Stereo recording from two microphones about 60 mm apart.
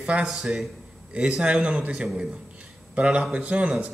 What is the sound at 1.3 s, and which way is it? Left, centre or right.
A man's voice, centre.